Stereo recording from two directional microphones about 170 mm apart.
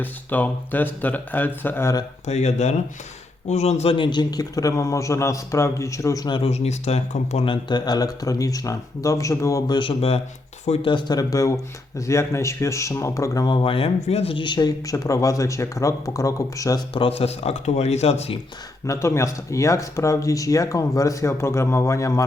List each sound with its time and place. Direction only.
0.0 s speech: 10° left (ahead or behind)
2.2 s speech: 40° left (ahead or behind)
6.5 s speech: 40° left (ahead or behind); by 16.8 s 20° left (ahead or behind)
16.9 s speech: 35° left (ahead or behind)
18.9 s speech: 15° left (ahead or behind)